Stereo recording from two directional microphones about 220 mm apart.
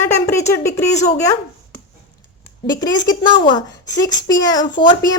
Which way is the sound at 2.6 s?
20° left (ahead or behind).